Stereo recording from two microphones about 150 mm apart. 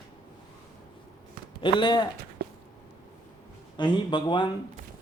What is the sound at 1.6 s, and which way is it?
Speech, 30° left (ahead or behind).